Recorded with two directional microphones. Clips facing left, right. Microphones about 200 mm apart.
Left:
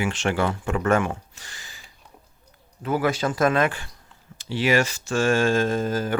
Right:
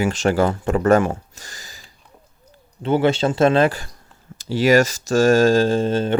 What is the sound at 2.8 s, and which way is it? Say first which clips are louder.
A man's voice: right 6 dB; 25° right (ahead or behind).